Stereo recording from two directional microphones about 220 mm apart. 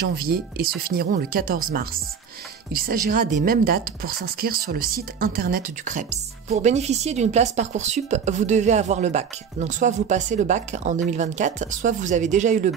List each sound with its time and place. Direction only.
0.2 s speech: 40° right (ahead or behind)